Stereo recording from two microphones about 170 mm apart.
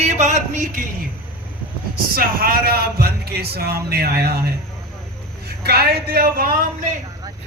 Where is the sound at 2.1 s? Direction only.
60° right (ahead or behind).